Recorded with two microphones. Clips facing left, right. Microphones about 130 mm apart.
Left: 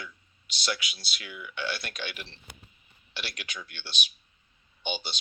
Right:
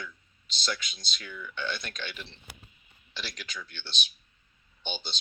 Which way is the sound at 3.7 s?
10° left (ahead or behind).